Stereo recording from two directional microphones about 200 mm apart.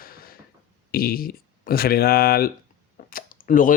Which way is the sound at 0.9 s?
50° left (ahead or behind).